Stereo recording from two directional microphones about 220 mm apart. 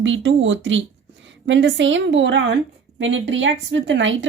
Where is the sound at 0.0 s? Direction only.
60° right (ahead or behind).